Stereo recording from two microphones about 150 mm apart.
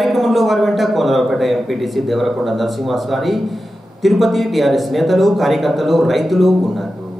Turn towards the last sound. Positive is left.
turn(degrees=0)  # may be behind; listen again after turning